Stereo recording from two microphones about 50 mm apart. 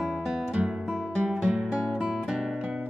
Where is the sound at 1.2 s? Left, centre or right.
Centre.